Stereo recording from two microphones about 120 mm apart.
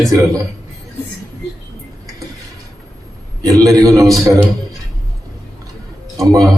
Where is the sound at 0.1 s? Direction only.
30° right (ahead or behind).